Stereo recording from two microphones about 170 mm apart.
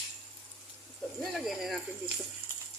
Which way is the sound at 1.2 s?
Centre (ahead or behind).